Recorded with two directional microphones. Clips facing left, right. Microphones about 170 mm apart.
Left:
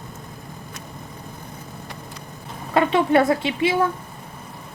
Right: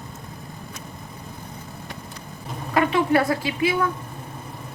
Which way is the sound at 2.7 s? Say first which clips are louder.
Left 2 dB; 25° left (ahead or behind).